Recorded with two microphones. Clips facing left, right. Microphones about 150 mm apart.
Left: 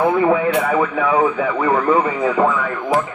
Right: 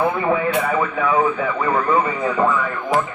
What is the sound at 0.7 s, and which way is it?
Speech, 75° left (ahead or behind).